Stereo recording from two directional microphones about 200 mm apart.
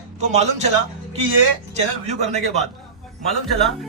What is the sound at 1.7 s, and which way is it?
Speech, 35° right (ahead or behind).